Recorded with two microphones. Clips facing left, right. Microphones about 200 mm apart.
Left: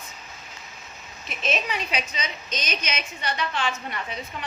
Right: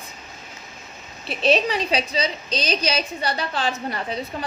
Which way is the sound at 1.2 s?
35° right (ahead or behind).